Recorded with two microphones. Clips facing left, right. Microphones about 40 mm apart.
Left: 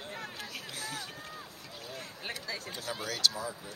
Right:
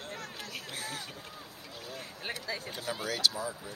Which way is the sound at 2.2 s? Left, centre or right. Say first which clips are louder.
Right 2 dB; centre.